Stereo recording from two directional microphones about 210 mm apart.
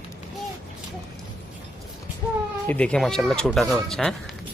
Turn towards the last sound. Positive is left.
turn(degrees=0)  # may be behind; listen again after turning